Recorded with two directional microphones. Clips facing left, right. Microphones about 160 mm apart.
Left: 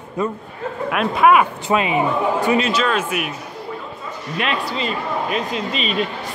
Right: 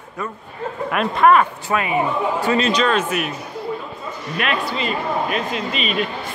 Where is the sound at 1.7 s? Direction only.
20° left (ahead or behind).